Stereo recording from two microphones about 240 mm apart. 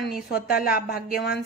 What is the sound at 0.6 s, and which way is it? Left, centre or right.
Speech, left.